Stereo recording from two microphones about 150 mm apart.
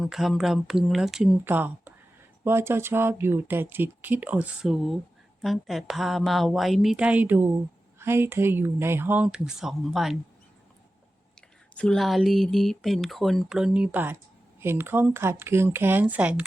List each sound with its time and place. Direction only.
0.0 s speech: centre (ahead or behind)
11.3 s speech: 5° left (ahead or behind); by 16.4 s 10° right (ahead or behind)